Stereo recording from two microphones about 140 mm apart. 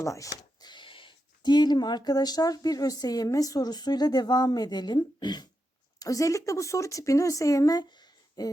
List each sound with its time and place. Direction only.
0.0 s speech: 25° left (ahead or behind)